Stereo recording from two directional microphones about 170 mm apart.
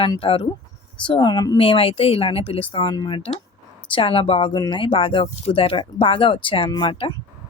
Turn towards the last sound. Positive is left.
turn(degrees=30)  # may be behind; listen again after turning